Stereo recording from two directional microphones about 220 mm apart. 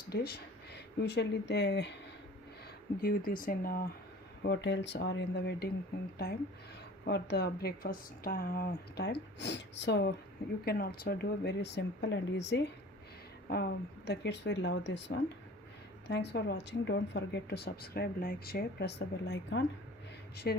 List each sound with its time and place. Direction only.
0.1 s speech: 45° left (ahead or behind)
3.0 s a woman's voice: 40° left (ahead or behind)
7.0 s a woman's voice: 50° left (ahead or behind)